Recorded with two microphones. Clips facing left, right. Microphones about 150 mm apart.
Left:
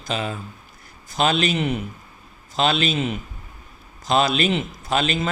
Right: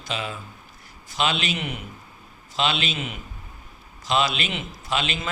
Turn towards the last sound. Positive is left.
turn(degrees=40)  # may be behind; listen again after turning